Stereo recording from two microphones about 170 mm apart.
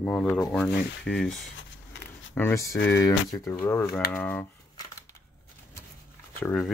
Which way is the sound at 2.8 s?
90° left.